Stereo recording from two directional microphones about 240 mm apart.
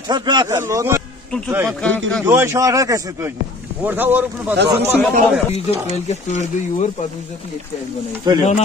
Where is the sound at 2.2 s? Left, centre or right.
Centre.